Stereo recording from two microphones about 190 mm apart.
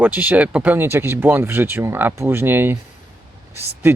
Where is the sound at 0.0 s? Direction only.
10° right (ahead or behind).